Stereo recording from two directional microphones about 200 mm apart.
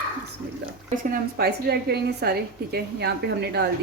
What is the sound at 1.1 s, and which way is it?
A woman's voice, 50° right (ahead or behind).